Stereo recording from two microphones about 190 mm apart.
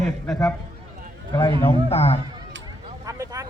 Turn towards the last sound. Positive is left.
turn(degrees=-20)  # may be behind; listen again after turning